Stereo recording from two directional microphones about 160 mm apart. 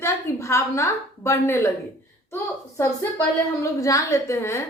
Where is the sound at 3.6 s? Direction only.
20° left (ahead or behind).